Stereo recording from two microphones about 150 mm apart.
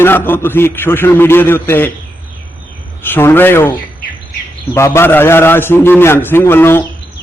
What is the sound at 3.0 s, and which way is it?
A man's voice, 15° left (ahead or behind).